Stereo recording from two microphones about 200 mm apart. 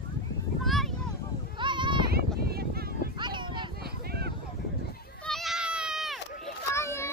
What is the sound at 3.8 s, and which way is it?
Vehicle, 50° right (ahead or behind).